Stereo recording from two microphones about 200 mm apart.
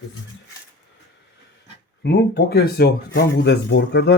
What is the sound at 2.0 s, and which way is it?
Speech, 55° left (ahead or behind).